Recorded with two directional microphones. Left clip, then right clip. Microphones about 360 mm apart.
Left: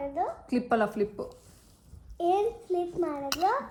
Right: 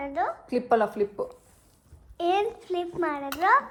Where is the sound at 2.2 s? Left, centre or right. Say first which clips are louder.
Right 2 dB; right.